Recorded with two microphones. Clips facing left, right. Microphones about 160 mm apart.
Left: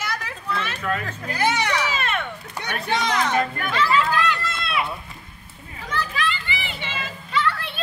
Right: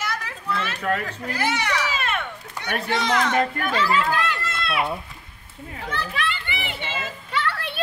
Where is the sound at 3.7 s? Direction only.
45° right (ahead or behind).